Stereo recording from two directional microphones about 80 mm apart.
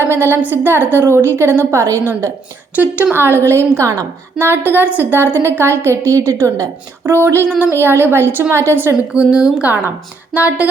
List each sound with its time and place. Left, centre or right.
0.0 s a woman's voice: right
2.7 s a woman's voice: right
4.4 s a woman's voice: right
9.1 s a woman's voice: centre